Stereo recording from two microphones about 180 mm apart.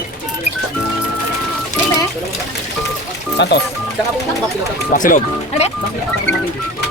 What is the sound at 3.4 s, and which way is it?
Speech, 75° left (ahead or behind).